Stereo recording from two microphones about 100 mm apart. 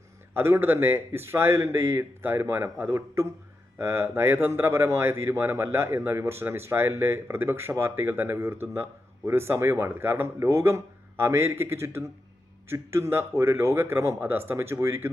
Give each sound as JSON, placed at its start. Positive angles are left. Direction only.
{"t": 0.3, "sound": "speech", "side_deg": -25}